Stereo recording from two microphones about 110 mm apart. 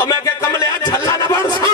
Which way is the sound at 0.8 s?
30° left (ahead or behind).